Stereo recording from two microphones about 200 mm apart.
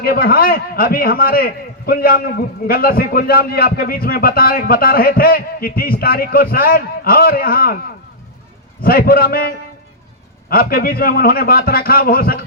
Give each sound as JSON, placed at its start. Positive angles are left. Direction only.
{"t": 0.0, "sound": "a man's voice", "side_deg": 45}
{"t": 8.8, "sound": "a man's voice", "side_deg": 50}